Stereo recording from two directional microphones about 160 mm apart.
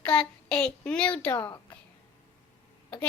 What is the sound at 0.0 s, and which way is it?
A child's voice, 5° left (ahead or behind).